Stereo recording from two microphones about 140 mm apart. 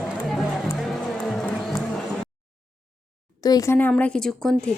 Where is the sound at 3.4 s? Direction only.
25° left (ahead or behind).